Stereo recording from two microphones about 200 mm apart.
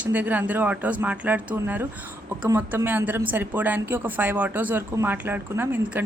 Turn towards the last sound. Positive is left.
turn(degrees=-10)  # may be behind; listen again after turning